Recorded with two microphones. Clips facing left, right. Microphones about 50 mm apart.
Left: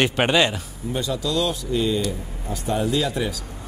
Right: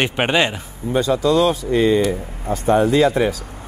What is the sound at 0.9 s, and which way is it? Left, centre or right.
Speech, right.